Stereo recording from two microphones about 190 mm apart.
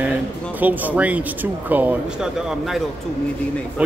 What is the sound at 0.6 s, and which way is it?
A man's voice, 10° right (ahead or behind).